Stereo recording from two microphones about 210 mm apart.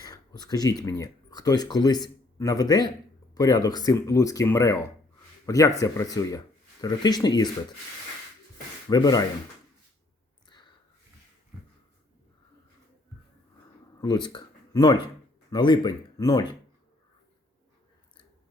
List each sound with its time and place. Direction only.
0.0 s speech: 20° left (ahead or behind)
8.9 s speech: 20° left (ahead or behind)
14.0 s speech: 20° left (ahead or behind)